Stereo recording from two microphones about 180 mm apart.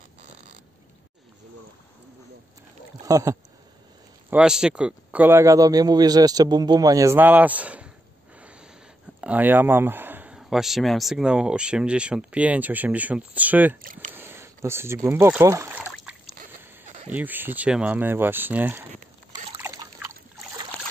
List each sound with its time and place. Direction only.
3.0 s speech: 20° right (ahead or behind)
4.3 s a man's voice: 5° right (ahead or behind)
8.4 s snort: 5° right (ahead or behind)
9.2 s a man's voice: 10° right (ahead or behind)
17.1 s a man's voice: 10° right (ahead or behind)
19.3 s trickle: 20° right (ahead or behind)